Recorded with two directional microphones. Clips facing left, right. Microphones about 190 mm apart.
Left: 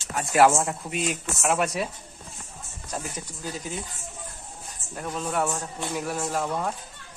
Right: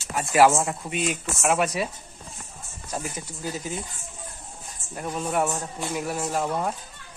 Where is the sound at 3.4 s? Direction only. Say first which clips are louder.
Right 3 dB; centre (ahead or behind).